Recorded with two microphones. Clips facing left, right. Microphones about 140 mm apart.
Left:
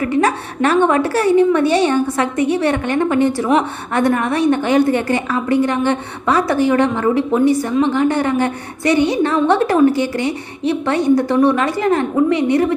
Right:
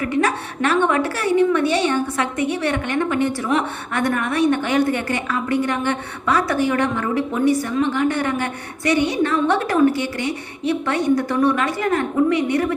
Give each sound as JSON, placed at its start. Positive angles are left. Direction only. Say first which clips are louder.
{"t": 0.0, "sound": "a woman's voice", "louder": "left 4 dB", "side_deg": 35}